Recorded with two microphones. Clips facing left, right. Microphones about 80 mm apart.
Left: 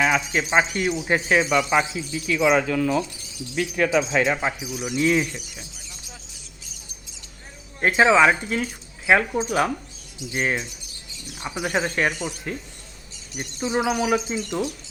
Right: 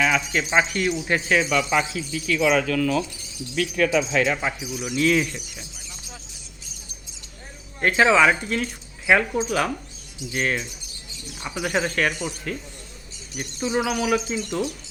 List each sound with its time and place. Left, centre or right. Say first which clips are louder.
0.0 s speech: left 1 dB; centre
5.2 s speech: even; centre
7.8 s speech: left 1 dB; centre